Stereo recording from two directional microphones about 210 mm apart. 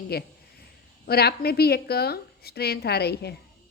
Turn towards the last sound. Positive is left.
turn(degrees=50)  # may be behind; listen again after turning